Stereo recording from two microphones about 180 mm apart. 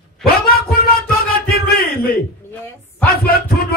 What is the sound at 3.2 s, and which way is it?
Speech, 55° left (ahead or behind).